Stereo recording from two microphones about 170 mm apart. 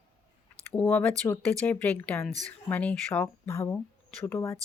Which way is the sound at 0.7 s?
10° left (ahead or behind).